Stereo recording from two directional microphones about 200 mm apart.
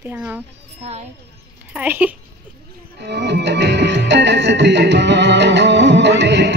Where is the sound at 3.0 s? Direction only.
55° right (ahead or behind).